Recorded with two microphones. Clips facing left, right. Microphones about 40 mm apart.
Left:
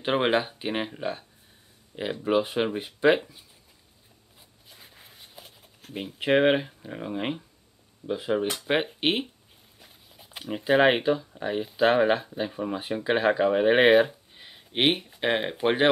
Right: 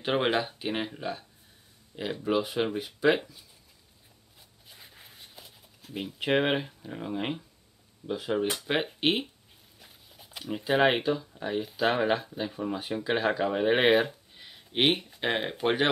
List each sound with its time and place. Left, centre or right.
0.0 s speech: centre
2.8 s speech: left
4.6 s a sound: centre
5.4 s a sound: left
6.1 s speech: centre
10.3 s speech: centre